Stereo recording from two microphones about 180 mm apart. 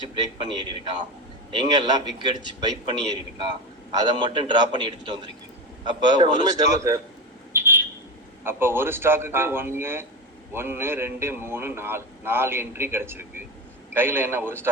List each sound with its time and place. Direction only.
0.3 s a man's voice: 25° right (ahead or behind)
7.5 s a sound: 15° right (ahead or behind)
8.4 s a man's voice: 15° right (ahead or behind)